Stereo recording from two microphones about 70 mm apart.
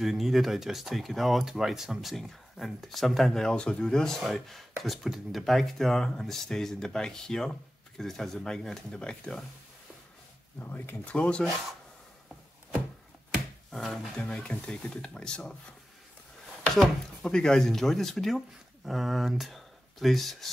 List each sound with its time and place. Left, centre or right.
0.0 s speech: centre
3.4 s speech: centre
10.6 s speech: left
11.1 s speech: centre
13.7 s speech: centre
16.7 s speech: centre